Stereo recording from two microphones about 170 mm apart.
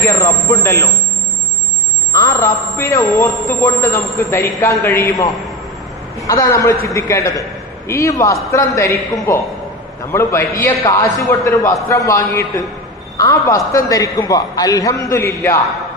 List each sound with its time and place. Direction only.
0.0 s a man's voice: 15° left (ahead or behind)
2.1 s a sound: 20° left (ahead or behind)
4.2 s a man's voice: 15° left (ahead or behind)